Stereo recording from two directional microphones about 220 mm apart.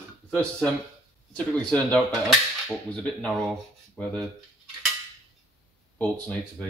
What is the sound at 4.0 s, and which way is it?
Dishes, 5° left (ahead or behind).